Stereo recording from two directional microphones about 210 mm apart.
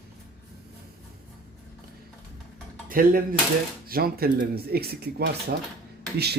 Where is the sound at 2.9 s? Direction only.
40° right (ahead or behind).